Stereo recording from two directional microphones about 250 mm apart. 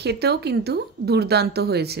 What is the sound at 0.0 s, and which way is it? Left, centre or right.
A woman's voice, right.